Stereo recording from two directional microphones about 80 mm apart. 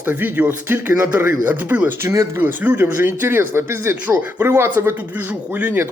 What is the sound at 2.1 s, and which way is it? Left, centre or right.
Speech, right.